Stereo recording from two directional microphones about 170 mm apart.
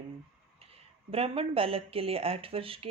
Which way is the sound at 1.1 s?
35° right (ahead or behind).